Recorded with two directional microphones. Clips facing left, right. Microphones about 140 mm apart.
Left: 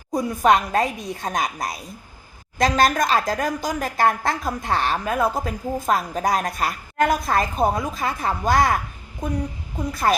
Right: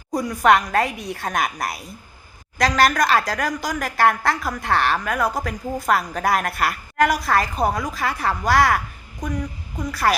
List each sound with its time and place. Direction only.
0.2 s a woman's voice: 20° left (ahead or behind)